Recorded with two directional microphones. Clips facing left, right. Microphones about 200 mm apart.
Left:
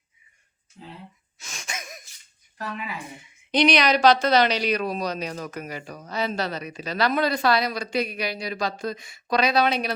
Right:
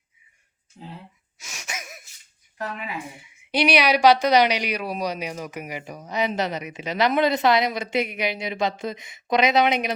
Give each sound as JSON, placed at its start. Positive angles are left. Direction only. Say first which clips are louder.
{"t": 0.8, "sound": "speech", "louder": "right 2 dB", "side_deg": -35}
{"t": 1.4, "sound": "wheeze", "louder": "even", "side_deg": -10}
{"t": 3.5, "sound": "speech", "louder": "even", "side_deg": -10}